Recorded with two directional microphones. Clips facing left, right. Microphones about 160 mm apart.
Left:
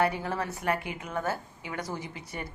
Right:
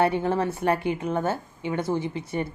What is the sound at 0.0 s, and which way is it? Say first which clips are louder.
A woman's voice: right 6 dB; 25° right (ahead or behind).